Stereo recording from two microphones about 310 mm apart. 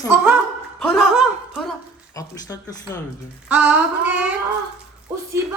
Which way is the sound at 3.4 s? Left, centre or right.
Centre.